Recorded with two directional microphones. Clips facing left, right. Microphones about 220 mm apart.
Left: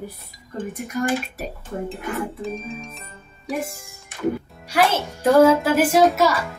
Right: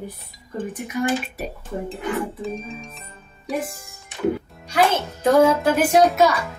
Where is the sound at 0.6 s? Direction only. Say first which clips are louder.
Even; centre (ahead or behind).